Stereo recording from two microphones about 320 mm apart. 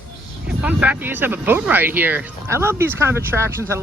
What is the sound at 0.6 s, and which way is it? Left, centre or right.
Speech, centre.